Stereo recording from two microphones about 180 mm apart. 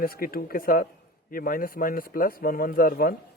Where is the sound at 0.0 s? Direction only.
55° left (ahead or behind).